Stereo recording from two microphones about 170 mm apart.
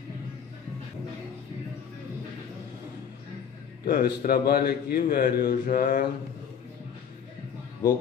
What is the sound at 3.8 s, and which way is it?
A man's voice, 60° left (ahead or behind).